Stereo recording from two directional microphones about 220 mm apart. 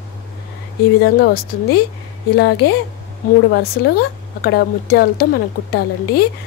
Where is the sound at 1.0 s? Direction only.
45° left (ahead or behind).